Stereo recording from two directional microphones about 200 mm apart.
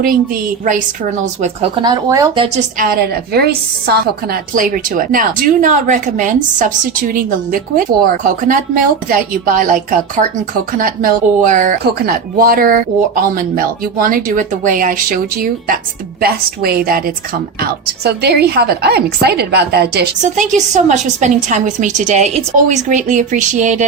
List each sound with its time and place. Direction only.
1.2 s a woman's voice: 35° right (ahead or behind)
1.7 s speech: 20° right (ahead or behind)
2.7 s a woman's voice: 45° right (ahead or behind)
20.2 s a woman's voice: 40° right (ahead or behind)